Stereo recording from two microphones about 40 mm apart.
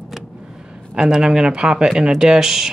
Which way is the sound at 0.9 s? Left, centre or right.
Centre.